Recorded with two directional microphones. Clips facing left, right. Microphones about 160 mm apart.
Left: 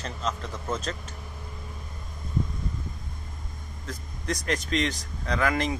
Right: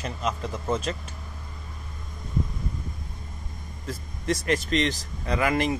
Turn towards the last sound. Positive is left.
turn(degrees=-5)  # may be behind; listen again after turning